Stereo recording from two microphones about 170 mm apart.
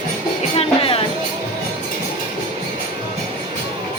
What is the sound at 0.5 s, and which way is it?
Music, 35° left (ahead or behind).